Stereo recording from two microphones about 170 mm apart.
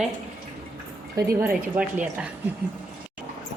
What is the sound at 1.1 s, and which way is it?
Speech, 15° right (ahead or behind).